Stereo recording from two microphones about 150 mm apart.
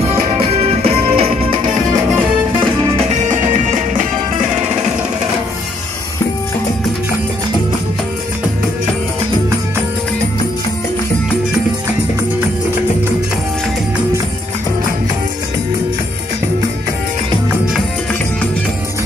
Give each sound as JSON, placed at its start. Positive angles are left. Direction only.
{"t": 0.1, "sound": "music", "side_deg": -40}
{"t": 3.1, "sound": "music", "side_deg": -55}